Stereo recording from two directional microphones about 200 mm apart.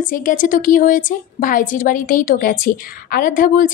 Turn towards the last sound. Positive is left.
turn(degrees=45)  # may be behind; listen again after turning